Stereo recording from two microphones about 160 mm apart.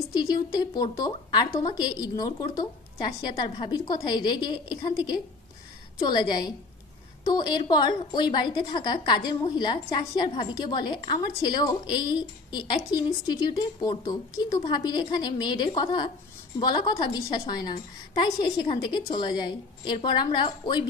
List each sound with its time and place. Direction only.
0.3 s a woman's voice: 25° left (ahead or behind)